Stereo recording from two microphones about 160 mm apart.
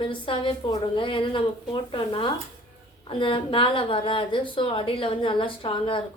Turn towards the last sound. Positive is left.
turn(degrees=35)  # may be behind; listen again after turning